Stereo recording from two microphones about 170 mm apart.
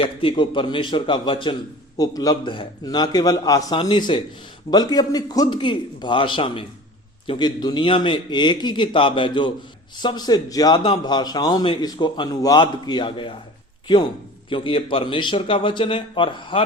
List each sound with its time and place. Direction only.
0.0 s a man's voice: 30° left (ahead or behind)
14.5 s a man's voice: 30° left (ahead or behind)